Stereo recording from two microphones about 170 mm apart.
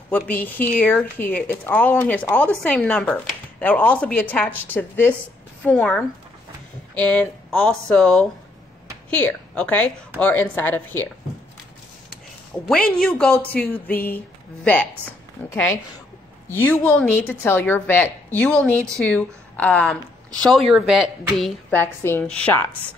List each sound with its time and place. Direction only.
0.3 s speech: 10° left (ahead or behind)
12.6 s speech: 5° left (ahead or behind)